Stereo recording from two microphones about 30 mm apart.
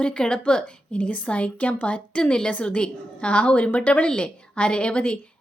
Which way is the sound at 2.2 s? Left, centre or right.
Left.